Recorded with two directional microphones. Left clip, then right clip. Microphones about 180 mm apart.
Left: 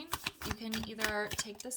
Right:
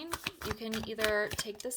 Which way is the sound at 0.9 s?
45° right (ahead or behind).